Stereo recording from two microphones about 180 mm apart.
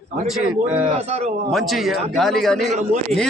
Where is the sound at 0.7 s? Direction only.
35° right (ahead or behind).